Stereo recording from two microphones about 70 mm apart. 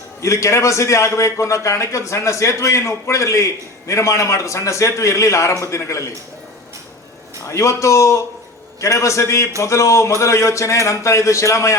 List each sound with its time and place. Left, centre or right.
0.2 s a man's voice: left
7.4 s a man's voice: left